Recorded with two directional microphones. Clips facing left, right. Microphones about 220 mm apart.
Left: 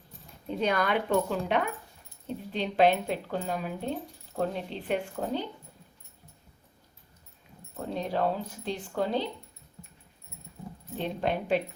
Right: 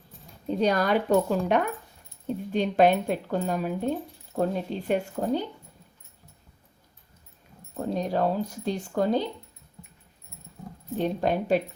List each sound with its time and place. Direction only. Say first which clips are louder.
0.4 s speech: right 4 dB; 35° right (ahead or behind)
7.9 s speech: right 3 dB; 40° right (ahead or behind)
10.9 s speech: right 5 dB; 45° right (ahead or behind)